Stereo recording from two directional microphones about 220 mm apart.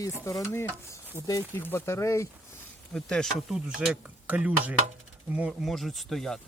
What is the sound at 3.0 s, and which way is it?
Speech, 5° left (ahead or behind).